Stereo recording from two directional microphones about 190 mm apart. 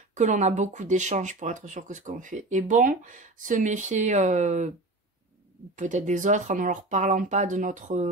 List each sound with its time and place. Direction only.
0.1 s speech: 40° right (ahead or behind)
5.8 s speech: 40° right (ahead or behind)